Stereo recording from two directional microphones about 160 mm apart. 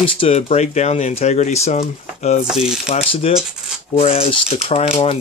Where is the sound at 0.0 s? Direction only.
35° left (ahead or behind).